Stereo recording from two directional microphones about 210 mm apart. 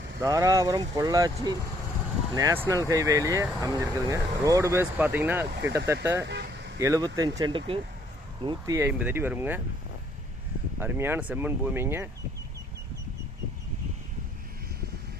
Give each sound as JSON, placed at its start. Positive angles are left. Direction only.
{"t": 0.2, "sound": "speech", "side_deg": -15}
{"t": 6.2, "sound": "vehicle", "side_deg": -55}
{"t": 6.7, "sound": "speech", "side_deg": -15}
{"t": 10.8, "sound": "speech", "side_deg": -10}